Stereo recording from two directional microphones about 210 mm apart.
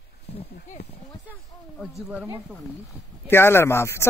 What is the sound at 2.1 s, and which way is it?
Speech, 5° right (ahead or behind).